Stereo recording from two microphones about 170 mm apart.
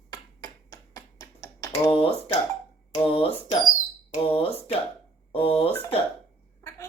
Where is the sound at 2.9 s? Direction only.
35° left (ahead or behind).